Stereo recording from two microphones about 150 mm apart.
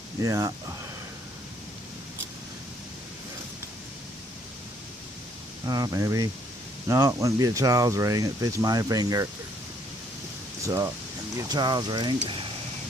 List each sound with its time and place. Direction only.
0.2 s speech: 20° right (ahead or behind)
5.6 s speech: 25° right (ahead or behind)
10.6 s speech: 20° right (ahead or behind)